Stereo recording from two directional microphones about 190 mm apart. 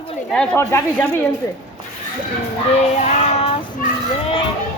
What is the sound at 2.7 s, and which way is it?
Child singing, 35° left (ahead or behind).